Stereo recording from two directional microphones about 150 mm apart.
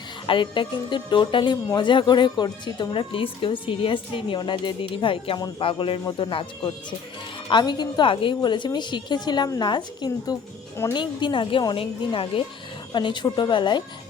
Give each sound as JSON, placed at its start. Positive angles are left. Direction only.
{"t": 0.3, "sound": "speech", "side_deg": 35}